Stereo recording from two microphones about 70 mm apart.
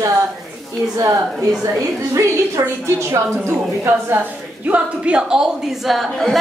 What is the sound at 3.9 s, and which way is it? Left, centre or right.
A woman's voice, right.